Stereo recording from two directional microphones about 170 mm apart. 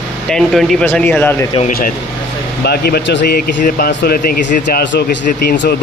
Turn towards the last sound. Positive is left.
turn(degrees=65)  # may be behind; listen again after turning